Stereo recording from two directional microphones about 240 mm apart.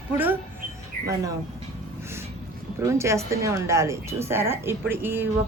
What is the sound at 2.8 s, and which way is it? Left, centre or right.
A woman's voice, centre.